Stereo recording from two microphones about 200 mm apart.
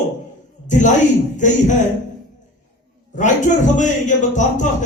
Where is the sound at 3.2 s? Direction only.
40° left (ahead or behind).